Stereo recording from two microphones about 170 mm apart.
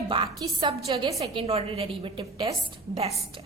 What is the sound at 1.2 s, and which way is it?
A woman's voice, 35° right (ahead or behind).